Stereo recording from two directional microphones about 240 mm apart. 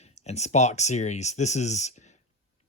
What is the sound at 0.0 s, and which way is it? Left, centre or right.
Speech, left.